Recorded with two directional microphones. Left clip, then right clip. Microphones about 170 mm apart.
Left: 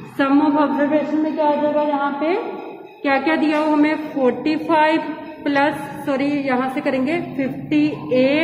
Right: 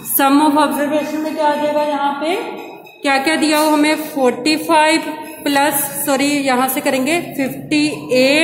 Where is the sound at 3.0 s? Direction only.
10° right (ahead or behind).